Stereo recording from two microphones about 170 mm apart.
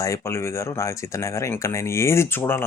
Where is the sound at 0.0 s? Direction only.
15° left (ahead or behind).